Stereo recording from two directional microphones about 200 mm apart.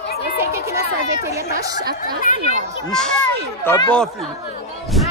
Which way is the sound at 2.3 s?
45° left (ahead or behind).